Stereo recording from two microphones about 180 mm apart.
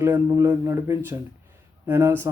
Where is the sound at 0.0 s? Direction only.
15° right (ahead or behind).